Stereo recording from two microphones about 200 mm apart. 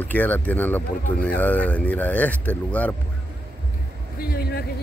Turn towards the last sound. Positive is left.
turn(degrees=50)  # may be behind; listen again after turning